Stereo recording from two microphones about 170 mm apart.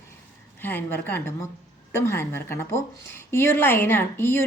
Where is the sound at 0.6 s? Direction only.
10° left (ahead or behind).